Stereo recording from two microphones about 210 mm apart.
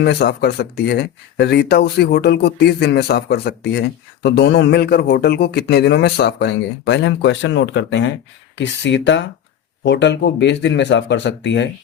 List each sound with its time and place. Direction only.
0.0 s speech: 50° left (ahead or behind)